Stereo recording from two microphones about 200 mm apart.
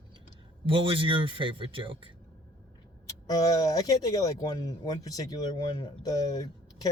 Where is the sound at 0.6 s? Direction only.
25° right (ahead or behind).